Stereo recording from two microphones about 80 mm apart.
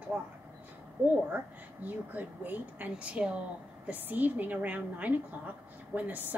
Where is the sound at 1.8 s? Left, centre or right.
Right.